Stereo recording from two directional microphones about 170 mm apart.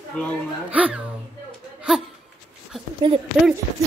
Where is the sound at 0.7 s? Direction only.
10° right (ahead or behind).